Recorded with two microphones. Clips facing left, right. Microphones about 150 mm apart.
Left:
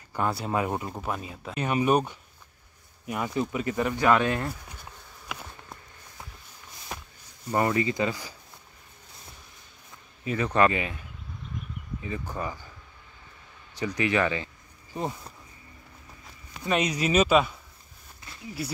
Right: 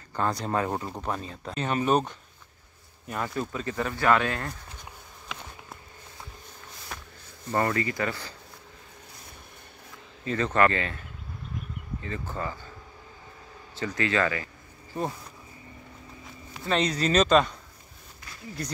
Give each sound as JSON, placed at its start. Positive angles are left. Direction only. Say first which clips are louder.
{"t": 0.1, "sound": "speech", "louder": "even", "side_deg": 10}
{"t": 5.3, "sound": "insect", "louder": "left 1 dB", "side_deg": 5}
{"t": 6.9, "sound": "a sound", "louder": "left 3 dB", "side_deg": 20}
{"t": 7.5, "sound": "speech", "louder": "left 2 dB", "side_deg": 15}
{"t": 10.2, "sound": "speech", "louder": "even", "side_deg": 10}
{"t": 12.0, "sound": "speech", "louder": "left 1 dB", "side_deg": 15}
{"t": 13.7, "sound": "speech", "louder": "left 1 dB", "side_deg": 15}
{"t": 16.6, "sound": "speech", "louder": "even", "side_deg": 10}
{"t": 18.6, "sound": "speech", "louder": "left 1 dB", "side_deg": 5}